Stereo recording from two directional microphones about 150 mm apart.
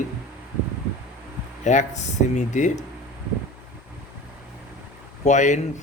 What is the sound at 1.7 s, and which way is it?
A man's voice, 50° left (ahead or behind).